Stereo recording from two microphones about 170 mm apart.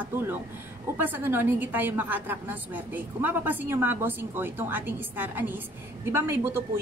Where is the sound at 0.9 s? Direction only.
10° right (ahead or behind).